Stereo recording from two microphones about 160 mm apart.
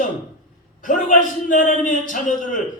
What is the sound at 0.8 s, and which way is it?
A man's voice, 55° left (ahead or behind).